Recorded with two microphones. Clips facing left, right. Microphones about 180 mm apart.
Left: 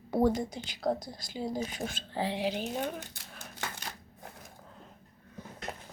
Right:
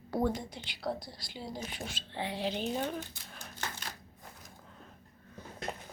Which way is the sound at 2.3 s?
10° left (ahead or behind).